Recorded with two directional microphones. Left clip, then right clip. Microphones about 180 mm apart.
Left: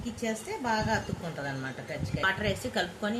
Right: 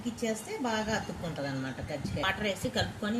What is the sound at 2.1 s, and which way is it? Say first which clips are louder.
Speech: left 3 dB; 30° left (ahead or behind).